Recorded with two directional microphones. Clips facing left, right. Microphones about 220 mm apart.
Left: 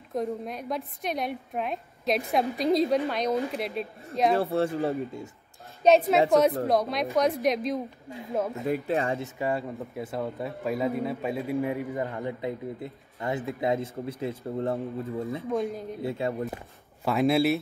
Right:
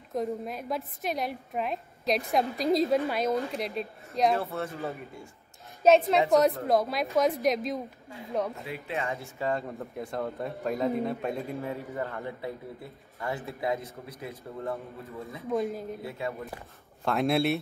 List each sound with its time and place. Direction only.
0.1 s a woman's voice: centre (ahead or behind)
4.4 s speech: 30° left (ahead or behind)
5.9 s a woman's voice: centre (ahead or behind)
8.6 s speech: 45° left (ahead or behind)
9.4 s a woman's voice: 5° left (ahead or behind)
11.6 s speech: 15° left (ahead or behind)
15.4 s a woman's voice: centre (ahead or behind)
16.0 s speech: 30° left (ahead or behind)
17.0 s a woman's voice: centre (ahead or behind)